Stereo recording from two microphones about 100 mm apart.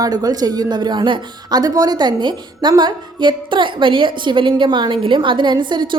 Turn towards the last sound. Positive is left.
turn(degrees=-50)  # may be behind; listen again after turning